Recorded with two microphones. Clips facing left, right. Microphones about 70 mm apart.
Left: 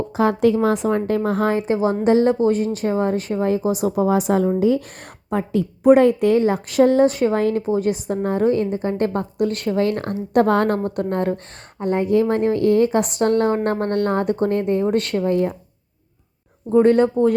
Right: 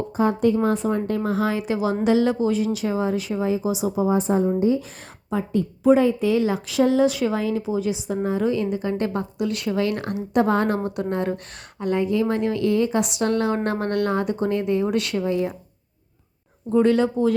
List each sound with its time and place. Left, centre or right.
0.2 s a woman's voice: left
5.3 s a woman's voice: left
10.4 s a woman's voice: left
10.8 s a woman's voice: left
16.7 s a woman's voice: left